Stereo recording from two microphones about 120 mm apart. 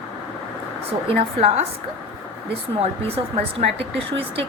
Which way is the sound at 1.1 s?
60° right (ahead or behind).